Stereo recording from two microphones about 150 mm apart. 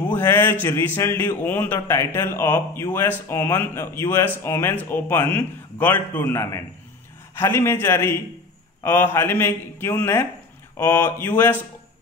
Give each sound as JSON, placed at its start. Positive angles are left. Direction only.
{"t": 0.1, "sound": "a man's voice", "side_deg": 15}